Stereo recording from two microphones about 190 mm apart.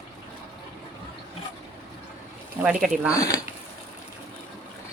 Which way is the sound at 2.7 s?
Centre (ahead or behind).